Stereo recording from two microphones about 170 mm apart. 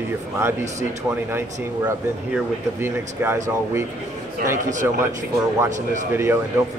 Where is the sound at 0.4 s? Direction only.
15° right (ahead or behind).